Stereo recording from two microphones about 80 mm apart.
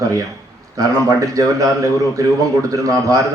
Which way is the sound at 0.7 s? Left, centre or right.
Right.